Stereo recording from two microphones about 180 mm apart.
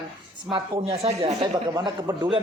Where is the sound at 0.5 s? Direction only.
30° right (ahead or behind).